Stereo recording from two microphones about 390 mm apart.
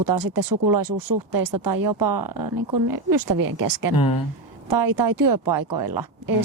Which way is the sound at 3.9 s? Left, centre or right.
Left.